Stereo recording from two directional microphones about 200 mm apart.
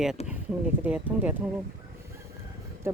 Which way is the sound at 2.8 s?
10° right (ahead or behind).